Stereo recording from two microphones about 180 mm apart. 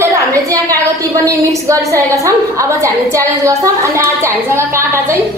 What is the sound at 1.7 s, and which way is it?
A woman's voice, 15° right (ahead or behind).